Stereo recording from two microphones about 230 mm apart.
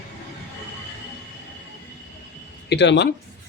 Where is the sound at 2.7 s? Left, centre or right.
Left.